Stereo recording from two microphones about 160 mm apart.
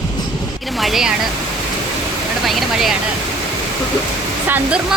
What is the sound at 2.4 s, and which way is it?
Speech, centre (ahead or behind).